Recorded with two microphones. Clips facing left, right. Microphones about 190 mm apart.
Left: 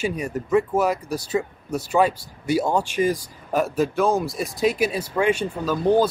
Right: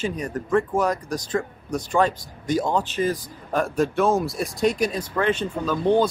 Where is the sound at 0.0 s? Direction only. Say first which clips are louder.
Left 1 dB; 10° left (ahead or behind).